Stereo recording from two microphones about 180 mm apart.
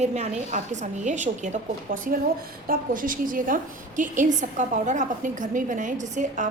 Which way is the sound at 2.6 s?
50° right (ahead or behind).